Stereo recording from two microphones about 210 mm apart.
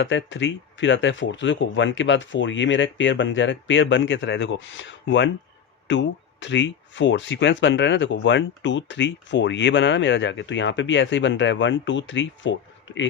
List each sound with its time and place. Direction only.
0.0 s speech: 60° left (ahead or behind)